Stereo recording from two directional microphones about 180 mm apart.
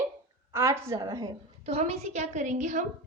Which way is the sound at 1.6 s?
35° right (ahead or behind).